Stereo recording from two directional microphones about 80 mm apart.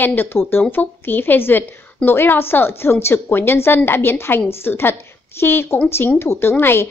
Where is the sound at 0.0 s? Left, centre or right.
Left.